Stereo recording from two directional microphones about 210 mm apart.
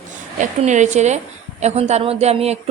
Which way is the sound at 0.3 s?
35° right (ahead or behind).